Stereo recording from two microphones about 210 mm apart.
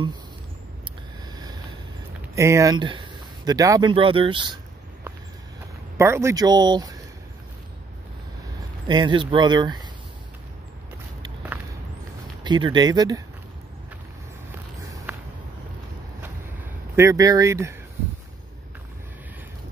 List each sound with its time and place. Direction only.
2.3 s speech: 15° right (ahead or behind)
5.9 s speech: 15° right (ahead or behind)
8.8 s speech: 20° right (ahead or behind)
12.4 s speech: 20° right (ahead or behind)
16.9 s speech: 15° right (ahead or behind)